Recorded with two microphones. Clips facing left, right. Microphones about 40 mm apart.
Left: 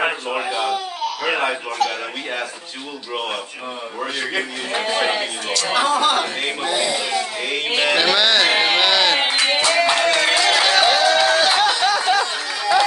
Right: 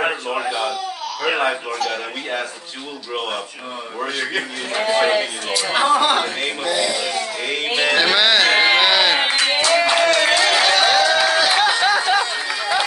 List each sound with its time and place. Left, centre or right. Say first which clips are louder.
0.0 s speech: even; centre
4.0 s speech: right 1 dB; centre
5.8 s speech: right 2 dB; right
6.8 s speech: even; centre
7.2 s speech: even; centre
8.5 s a sound: right 2 dB; centre
9.7 s clapping: right 3 dB; centre
10.0 s a sound: right 1 dB; centre
10.6 s run: even; centre
11.7 s a sound: right 1 dB; centre
12.1 s chatter: even; centre